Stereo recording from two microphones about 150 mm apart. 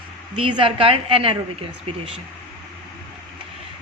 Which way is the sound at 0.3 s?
35° right (ahead or behind).